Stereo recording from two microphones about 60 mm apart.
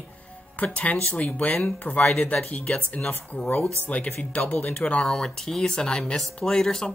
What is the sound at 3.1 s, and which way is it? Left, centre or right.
Speech, left.